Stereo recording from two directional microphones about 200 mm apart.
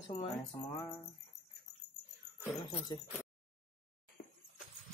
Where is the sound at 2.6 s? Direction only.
25° left (ahead or behind).